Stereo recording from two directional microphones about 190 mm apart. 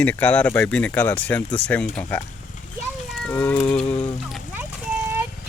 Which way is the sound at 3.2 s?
10° left (ahead or behind).